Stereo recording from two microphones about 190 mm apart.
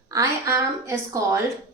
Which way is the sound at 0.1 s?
15° right (ahead or behind).